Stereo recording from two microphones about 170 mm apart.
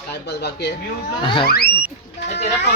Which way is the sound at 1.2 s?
30° left (ahead or behind).